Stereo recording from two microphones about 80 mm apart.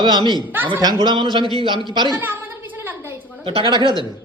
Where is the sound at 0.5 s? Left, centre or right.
Right.